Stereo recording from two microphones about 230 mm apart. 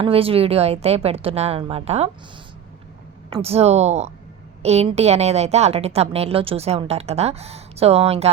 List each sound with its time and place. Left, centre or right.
0.0 s a woman's voice: right
3.2 s a woman's voice: right